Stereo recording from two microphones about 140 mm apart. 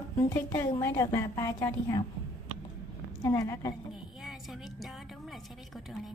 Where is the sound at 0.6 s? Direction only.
20° left (ahead or behind).